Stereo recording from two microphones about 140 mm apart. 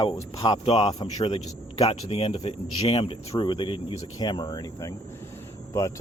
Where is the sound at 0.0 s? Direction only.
35° left (ahead or behind).